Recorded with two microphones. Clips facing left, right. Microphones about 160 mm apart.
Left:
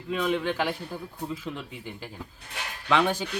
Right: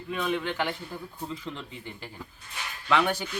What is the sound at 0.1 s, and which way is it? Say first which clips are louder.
Speech: left 3 dB; 15° left (ahead or behind).